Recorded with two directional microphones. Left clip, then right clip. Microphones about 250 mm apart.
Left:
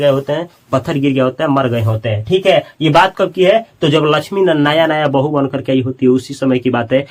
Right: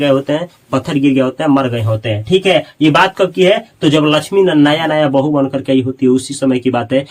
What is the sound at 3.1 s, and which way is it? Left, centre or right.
A man's voice, centre.